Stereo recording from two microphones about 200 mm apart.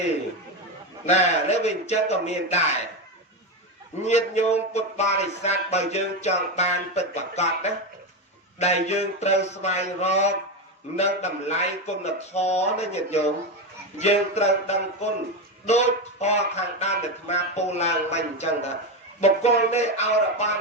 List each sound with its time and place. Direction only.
1.0 s speech: 35° left (ahead or behind)
4.0 s speech: 35° left (ahead or behind)